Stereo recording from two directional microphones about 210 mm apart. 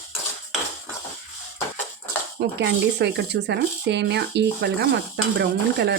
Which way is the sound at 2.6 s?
55° right (ahead or behind).